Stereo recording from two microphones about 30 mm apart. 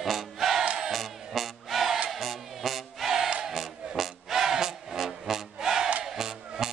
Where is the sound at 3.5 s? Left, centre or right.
Centre.